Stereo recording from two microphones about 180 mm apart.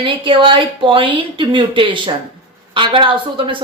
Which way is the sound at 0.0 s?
30° right (ahead or behind).